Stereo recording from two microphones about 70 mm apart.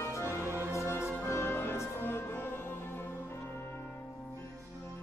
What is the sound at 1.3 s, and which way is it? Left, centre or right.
Music, left.